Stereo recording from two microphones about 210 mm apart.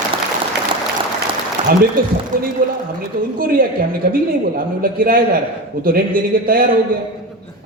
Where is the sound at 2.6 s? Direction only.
40° right (ahead or behind).